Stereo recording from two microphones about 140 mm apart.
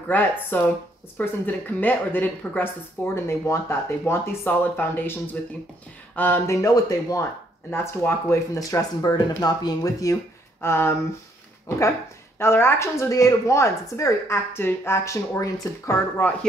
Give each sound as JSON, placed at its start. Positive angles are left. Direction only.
{"t": 0.1, "sound": "speech", "side_deg": 15}
{"t": 12.4, "sound": "speech", "side_deg": 15}